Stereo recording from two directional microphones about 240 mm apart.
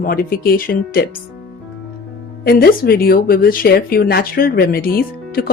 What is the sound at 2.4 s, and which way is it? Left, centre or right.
Speech, left.